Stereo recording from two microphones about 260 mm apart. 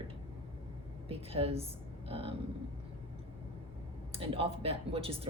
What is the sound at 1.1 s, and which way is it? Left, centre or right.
Speech, right.